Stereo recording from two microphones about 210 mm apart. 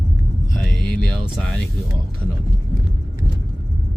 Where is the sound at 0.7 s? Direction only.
5° left (ahead or behind).